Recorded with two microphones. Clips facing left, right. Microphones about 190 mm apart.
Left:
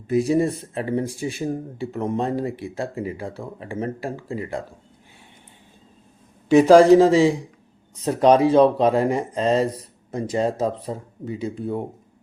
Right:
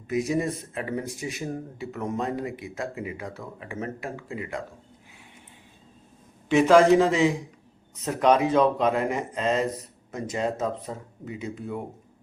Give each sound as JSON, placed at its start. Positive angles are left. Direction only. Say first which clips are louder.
{"t": 0.1, "sound": "speech", "louder": "left 6 dB", "side_deg": 30}
{"t": 6.5, "sound": "speech", "louder": "left 6 dB", "side_deg": 35}